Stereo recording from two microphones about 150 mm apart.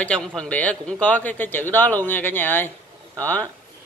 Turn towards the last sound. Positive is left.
turn(degrees=10)  # may be behind; listen again after turning